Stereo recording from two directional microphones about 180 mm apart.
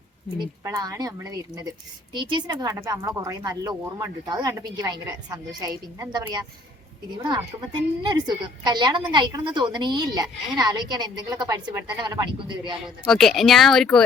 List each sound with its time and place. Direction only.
0.3 s a woman's voice: 20° right (ahead or behind)
13.1 s speech: centre (ahead or behind)